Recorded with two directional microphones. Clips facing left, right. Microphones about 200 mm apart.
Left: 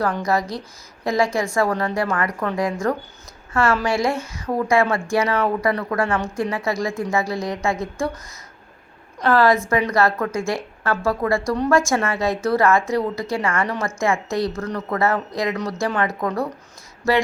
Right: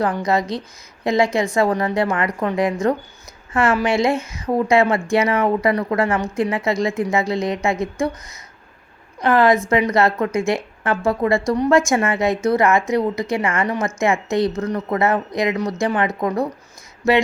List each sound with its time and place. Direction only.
0.0 s speech: 20° right (ahead or behind)
9.2 s a woman's voice: 20° right (ahead or behind)